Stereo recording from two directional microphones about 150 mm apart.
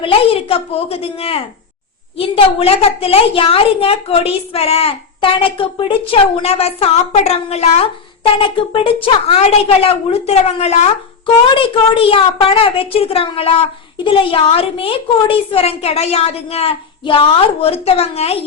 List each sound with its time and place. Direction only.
0.0 s a woman's voice: 40° left (ahead or behind)